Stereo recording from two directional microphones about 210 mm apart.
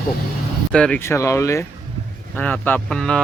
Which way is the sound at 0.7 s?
5° left (ahead or behind).